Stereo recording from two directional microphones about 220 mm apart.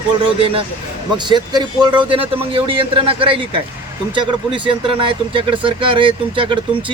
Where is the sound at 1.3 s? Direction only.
20° right (ahead or behind).